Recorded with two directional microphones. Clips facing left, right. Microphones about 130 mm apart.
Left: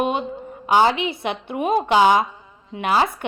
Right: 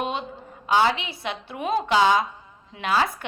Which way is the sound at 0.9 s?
55° left (ahead or behind).